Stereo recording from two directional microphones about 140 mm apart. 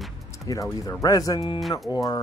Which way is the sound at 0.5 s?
25° left (ahead or behind).